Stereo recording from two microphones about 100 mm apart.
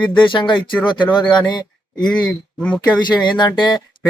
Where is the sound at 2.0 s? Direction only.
5° left (ahead or behind).